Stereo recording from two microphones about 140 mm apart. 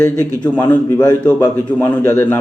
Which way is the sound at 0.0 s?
15° left (ahead or behind).